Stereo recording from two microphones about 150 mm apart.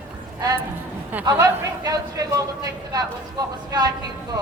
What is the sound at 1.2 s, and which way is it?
Speech, 25° right (ahead or behind).